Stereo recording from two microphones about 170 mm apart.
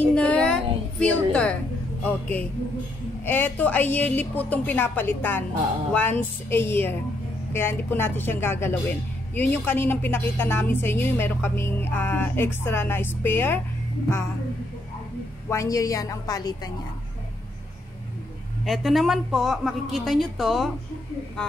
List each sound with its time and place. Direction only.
0.1 s a sound: 5° left (ahead or behind)
2.0 s a woman's voice: 10° left (ahead or behind)
15.5 s a woman's voice: 20° left (ahead or behind)
18.6 s a woman's voice: centre (ahead or behind)